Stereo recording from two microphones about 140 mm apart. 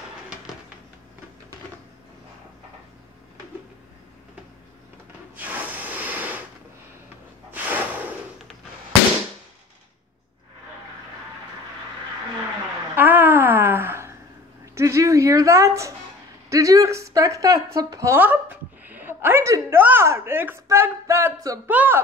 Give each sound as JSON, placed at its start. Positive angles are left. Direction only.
{"t": 5.3, "sound": "snort", "side_deg": -10}
{"t": 7.5, "sound": "snort", "side_deg": -15}
{"t": 12.9, "sound": "a sound", "side_deg": -15}
{"t": 16.4, "sound": "a woman's voice", "side_deg": -25}